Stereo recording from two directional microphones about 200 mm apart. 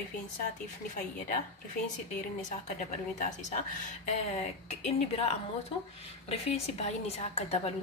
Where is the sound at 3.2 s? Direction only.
35° left (ahead or behind).